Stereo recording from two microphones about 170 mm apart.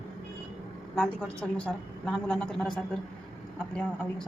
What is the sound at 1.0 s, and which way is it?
A woman's voice, 5° left (ahead or behind).